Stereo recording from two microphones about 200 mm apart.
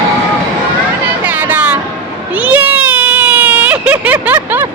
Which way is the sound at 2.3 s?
5° right (ahead or behind).